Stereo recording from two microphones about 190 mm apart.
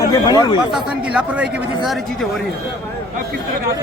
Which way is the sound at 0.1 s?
20° left (ahead or behind).